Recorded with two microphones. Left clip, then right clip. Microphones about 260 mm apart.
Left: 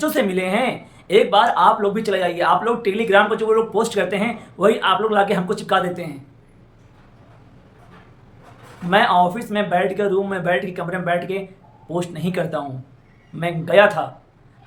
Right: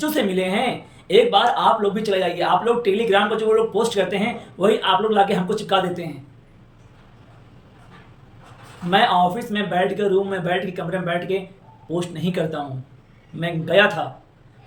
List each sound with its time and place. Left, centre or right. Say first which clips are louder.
0.0 s speech: left 1 dB; centre
8.9 s speech: left 1 dB; centre